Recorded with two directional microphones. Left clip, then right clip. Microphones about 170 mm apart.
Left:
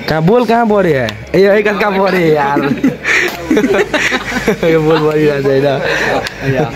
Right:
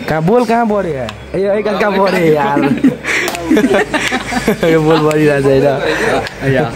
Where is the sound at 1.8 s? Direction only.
5° right (ahead or behind).